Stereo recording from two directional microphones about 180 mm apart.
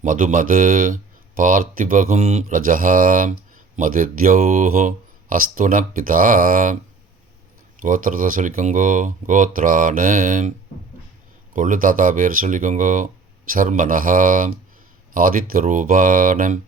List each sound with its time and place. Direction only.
0.0 s speech: 45° right (ahead or behind)
7.8 s speech: 45° right (ahead or behind)
11.5 s speech: 45° right (ahead or behind)